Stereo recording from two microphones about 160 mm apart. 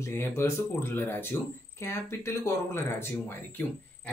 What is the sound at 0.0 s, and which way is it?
Speech, 15° left (ahead or behind).